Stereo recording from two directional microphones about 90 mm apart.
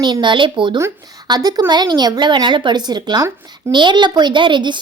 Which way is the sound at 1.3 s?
50° right (ahead or behind).